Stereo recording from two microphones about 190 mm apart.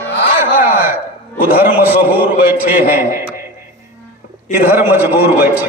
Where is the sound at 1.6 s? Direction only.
50° left (ahead or behind).